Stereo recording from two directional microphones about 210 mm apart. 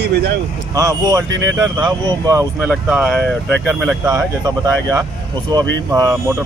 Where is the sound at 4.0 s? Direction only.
15° right (ahead or behind).